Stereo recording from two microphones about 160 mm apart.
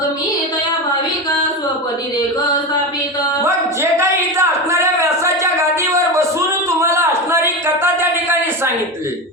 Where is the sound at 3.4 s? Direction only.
15° right (ahead or behind).